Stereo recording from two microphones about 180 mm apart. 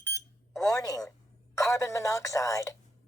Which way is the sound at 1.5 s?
15° left (ahead or behind).